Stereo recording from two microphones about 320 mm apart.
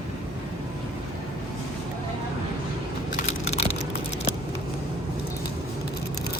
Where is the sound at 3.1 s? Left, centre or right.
Centre.